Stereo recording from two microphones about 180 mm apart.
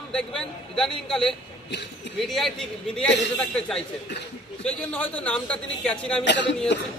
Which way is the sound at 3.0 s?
75° left (ahead or behind).